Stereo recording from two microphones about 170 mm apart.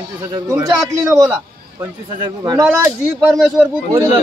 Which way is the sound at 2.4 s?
20° right (ahead or behind).